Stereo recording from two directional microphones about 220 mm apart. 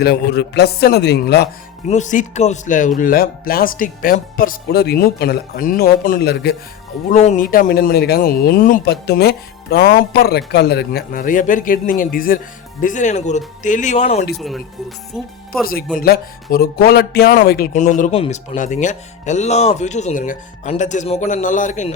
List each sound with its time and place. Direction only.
0.0 s a man's voice: 45° left (ahead or behind)
1.9 s speech: 35° left (ahead or behind)
7.1 s speech: 35° left (ahead or behind)
14.3 s speech: centre (ahead or behind)
16.0 s speech: 40° left (ahead or behind)